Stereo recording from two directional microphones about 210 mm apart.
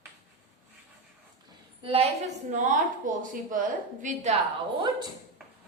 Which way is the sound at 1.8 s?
25° right (ahead or behind).